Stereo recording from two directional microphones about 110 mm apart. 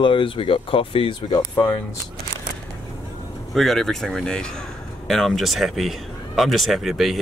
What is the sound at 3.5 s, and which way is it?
Speech, centre (ahead or behind).